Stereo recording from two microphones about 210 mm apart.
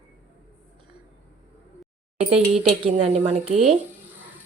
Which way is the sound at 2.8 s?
25° right (ahead or behind).